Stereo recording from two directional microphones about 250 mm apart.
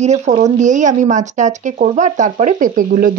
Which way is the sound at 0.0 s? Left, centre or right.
Right.